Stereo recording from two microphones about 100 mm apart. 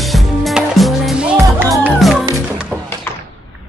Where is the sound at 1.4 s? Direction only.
25° right (ahead or behind).